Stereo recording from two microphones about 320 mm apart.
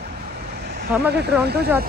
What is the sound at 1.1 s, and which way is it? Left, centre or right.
Speech, right.